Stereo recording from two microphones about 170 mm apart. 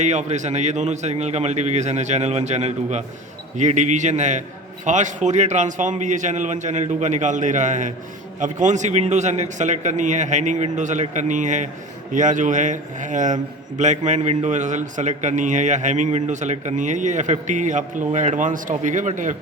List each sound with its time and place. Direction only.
0.0 s a man's voice: 45° right (ahead or behind)